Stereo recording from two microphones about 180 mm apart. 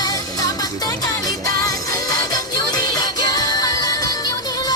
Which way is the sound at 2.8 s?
20° left (ahead or behind).